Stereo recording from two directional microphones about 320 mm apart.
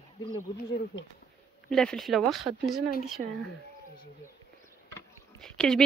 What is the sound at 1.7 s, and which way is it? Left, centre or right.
Speech, centre.